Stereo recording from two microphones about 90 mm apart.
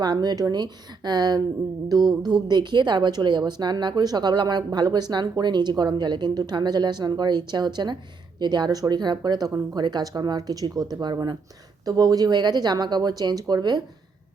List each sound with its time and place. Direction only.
0.0 s a woman's voice: 50° right (ahead or behind)